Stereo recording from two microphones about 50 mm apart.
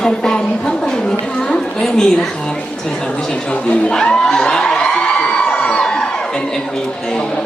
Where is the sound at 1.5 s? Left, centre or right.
Centre.